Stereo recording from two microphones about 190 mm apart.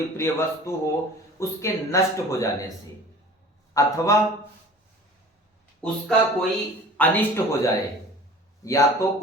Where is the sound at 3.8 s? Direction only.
15° left (ahead or behind).